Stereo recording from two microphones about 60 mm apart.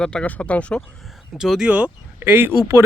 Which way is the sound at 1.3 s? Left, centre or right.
Centre.